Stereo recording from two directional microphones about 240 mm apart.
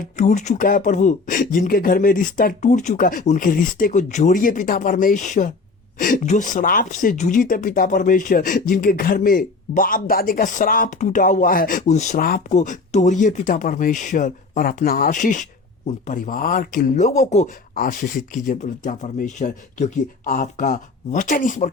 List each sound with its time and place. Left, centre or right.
0.0 s speech: left